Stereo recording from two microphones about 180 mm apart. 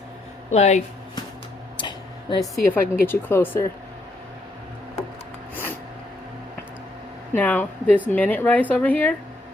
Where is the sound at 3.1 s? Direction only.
10° left (ahead or behind).